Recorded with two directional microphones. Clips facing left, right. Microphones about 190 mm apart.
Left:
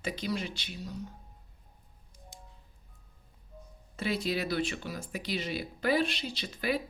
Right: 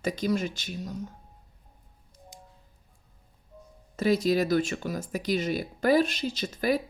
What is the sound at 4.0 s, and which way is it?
Speech, 40° right (ahead or behind).